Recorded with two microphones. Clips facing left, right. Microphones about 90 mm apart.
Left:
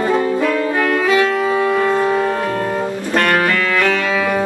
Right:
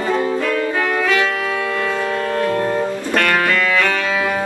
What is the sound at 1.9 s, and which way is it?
Organ, 15° left (ahead or behind).